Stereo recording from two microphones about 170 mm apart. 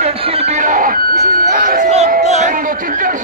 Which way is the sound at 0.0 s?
35° right (ahead or behind).